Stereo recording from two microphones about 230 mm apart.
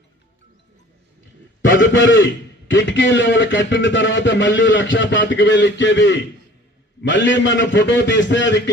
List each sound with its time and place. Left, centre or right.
1.6 s a man's voice: left